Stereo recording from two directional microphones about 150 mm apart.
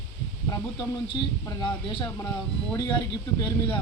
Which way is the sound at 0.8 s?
30° left (ahead or behind).